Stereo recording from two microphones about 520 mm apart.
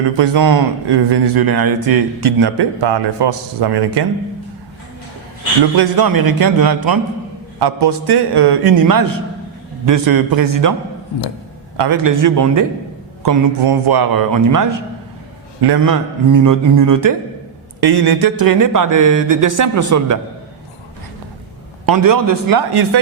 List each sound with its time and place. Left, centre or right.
0.2 s speech: right
5.7 s speech: right
11.8 s speech: right
21.8 s speech: right